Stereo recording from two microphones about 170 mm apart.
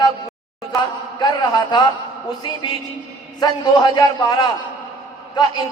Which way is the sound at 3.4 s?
25° left (ahead or behind).